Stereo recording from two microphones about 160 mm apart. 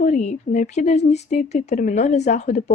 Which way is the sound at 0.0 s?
50° left (ahead or behind).